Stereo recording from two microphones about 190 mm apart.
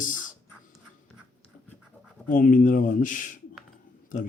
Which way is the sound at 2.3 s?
45° left (ahead or behind).